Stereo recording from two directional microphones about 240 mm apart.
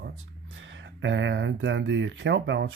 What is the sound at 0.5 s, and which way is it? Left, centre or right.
Speech, right.